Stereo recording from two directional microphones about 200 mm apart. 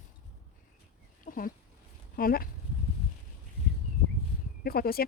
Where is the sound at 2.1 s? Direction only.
45° left (ahead or behind).